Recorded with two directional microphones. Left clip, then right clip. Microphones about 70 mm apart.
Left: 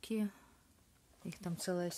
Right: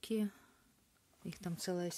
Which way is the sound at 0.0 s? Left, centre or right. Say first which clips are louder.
Right 1 dB; right.